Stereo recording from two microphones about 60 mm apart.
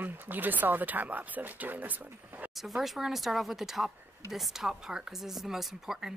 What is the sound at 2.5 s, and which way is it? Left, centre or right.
Speech, centre.